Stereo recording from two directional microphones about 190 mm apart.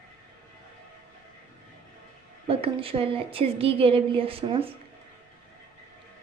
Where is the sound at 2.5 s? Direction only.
30° right (ahead or behind).